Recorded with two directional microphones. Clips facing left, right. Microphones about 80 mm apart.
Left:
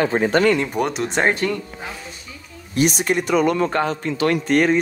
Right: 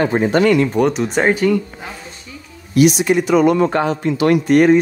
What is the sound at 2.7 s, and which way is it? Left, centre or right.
Speech, left.